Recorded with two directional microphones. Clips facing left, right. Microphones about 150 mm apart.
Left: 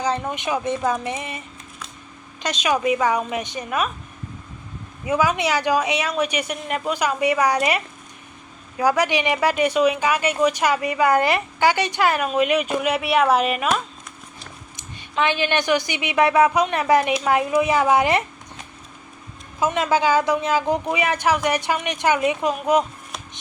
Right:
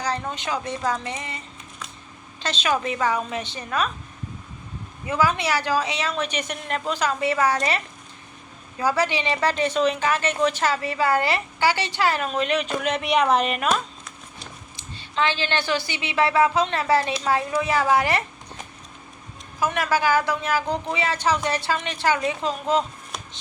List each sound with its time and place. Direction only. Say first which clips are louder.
0.0 s a woman's voice: left 4 dB; 20° left (ahead or behind)
2.4 s a woman's voice: left 3 dB; 15° left (ahead or behind)
5.0 s a woman's voice: left 2 dB; 15° left (ahead or behind)
8.8 s a woman's voice: left 3 dB; 15° left (ahead or behind)
14.9 s a woman's voice: left 3 dB; 15° left (ahead or behind)
19.5 s a woman's voice: left 3 dB; 20° left (ahead or behind)